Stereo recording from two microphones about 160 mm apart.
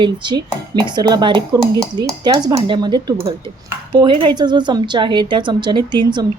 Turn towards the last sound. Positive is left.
turn(degrees=-25)  # may be behind; listen again after turning